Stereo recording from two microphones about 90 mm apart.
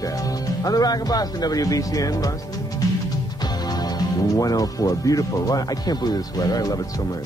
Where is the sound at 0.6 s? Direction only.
45° left (ahead or behind).